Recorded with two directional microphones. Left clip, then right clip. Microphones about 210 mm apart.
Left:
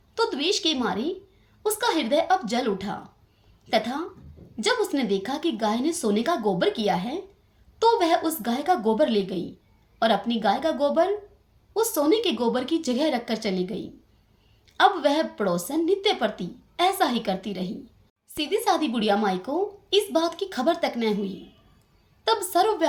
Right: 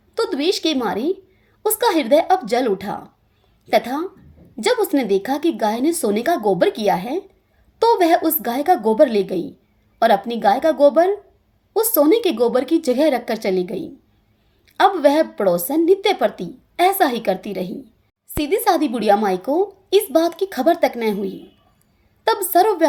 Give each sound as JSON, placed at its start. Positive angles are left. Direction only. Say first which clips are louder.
{"t": 0.1, "sound": "a woman's voice", "louder": "right 4 dB", "side_deg": -40}
{"t": 22.2, "sound": "a woman's voice", "louder": "right 6 dB", "side_deg": -40}